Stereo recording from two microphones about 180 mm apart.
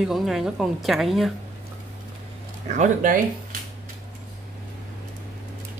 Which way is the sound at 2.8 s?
45° right (ahead or behind).